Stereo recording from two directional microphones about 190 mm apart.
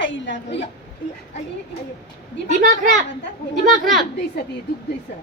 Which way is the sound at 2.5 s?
40° right (ahead or behind).